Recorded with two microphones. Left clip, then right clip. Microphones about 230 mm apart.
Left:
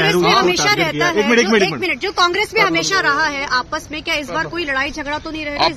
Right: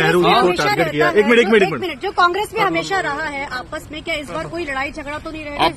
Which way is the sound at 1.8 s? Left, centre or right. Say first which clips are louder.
Even; left.